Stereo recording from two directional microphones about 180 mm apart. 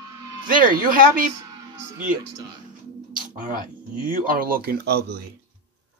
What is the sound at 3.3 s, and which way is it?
Speech, 50° right (ahead or behind).